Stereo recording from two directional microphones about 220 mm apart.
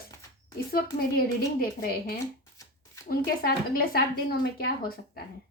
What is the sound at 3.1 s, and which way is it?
A woman's voice, 45° left (ahead or behind).